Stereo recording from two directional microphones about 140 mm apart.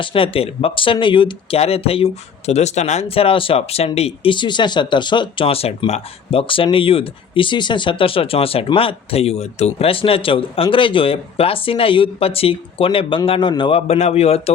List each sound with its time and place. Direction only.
0.0 s a man's voice: 40° left (ahead or behind)